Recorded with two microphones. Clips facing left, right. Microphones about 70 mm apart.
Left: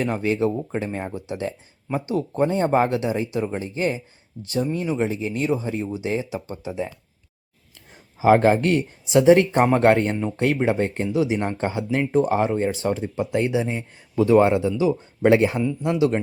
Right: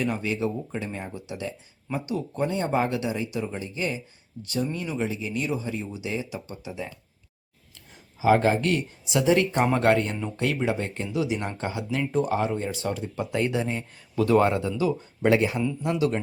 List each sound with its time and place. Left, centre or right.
0.0 s speech: left
8.2 s speech: left
12.7 s speech: left